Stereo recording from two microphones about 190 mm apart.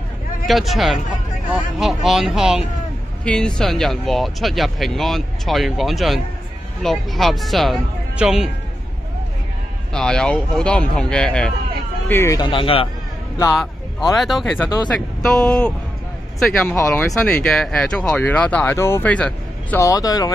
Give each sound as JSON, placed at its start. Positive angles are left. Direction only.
{"t": 0.5, "sound": "speech", "side_deg": 0}
{"t": 9.9, "sound": "speech", "side_deg": 5}
{"t": 14.2, "sound": "speech", "side_deg": 0}